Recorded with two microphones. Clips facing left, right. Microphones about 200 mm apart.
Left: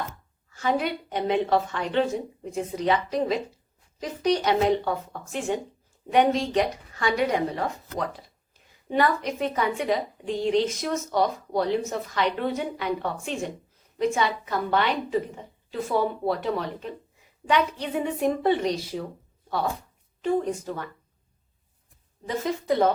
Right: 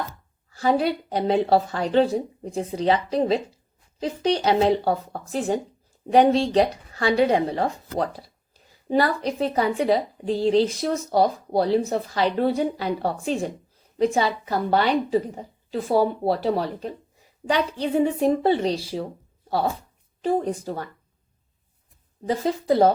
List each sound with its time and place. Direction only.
0.5 s a woman's voice: 35° right (ahead or behind)
20.2 s a woman's voice: 35° right (ahead or behind)
22.3 s a woman's voice: 35° right (ahead or behind)